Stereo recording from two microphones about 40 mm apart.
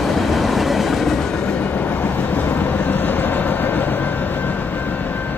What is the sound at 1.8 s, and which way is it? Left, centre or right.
Vehicle, left.